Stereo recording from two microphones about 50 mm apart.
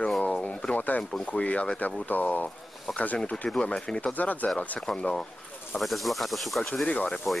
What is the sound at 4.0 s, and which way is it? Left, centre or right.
Speech, left.